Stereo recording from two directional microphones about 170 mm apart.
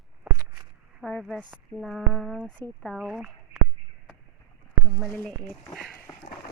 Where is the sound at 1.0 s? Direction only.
Centre (ahead or behind).